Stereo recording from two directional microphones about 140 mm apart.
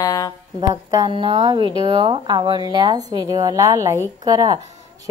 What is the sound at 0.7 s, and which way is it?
Speech, 30° right (ahead or behind).